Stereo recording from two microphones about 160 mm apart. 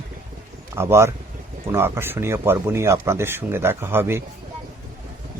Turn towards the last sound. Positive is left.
turn(degrees=-15)  # may be behind; listen again after turning